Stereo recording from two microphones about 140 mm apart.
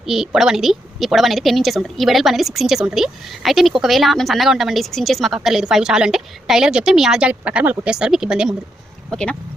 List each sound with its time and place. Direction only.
0.0 s a woman's voice: 5° right (ahead or behind)